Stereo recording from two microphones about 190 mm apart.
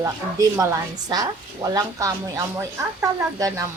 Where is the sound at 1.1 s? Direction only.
20° right (ahead or behind).